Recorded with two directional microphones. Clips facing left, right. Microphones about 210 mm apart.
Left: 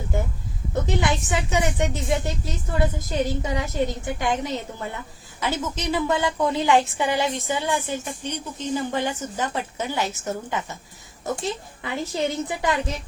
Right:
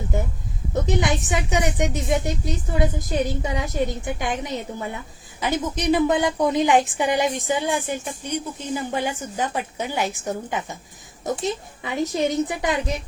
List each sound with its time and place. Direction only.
0.7 s a woman's voice: 20° right (ahead or behind)